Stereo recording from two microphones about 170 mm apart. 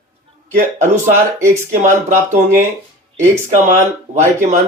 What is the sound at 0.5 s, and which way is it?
Speech, 45° right (ahead or behind).